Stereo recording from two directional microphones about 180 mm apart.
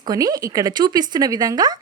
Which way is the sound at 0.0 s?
20° right (ahead or behind).